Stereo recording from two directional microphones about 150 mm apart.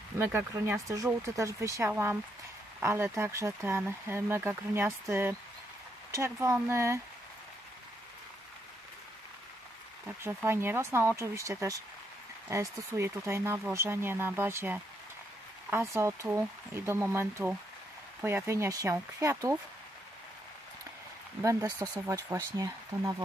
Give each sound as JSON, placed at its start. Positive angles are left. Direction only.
{"t": 0.2, "sound": "speech", "side_deg": -15}
{"t": 10.0, "sound": "speech", "side_deg": -15}
{"t": 21.4, "sound": "speech", "side_deg": -20}